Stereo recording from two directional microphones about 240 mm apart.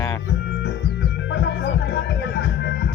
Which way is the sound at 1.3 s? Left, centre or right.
Left.